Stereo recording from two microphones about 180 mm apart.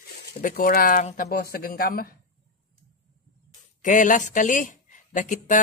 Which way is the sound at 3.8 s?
45° left (ahead or behind).